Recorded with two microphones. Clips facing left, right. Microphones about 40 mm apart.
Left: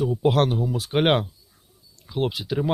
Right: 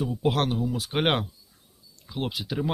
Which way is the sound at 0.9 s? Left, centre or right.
Left.